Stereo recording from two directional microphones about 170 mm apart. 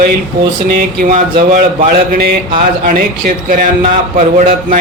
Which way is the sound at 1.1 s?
50° right (ahead or behind).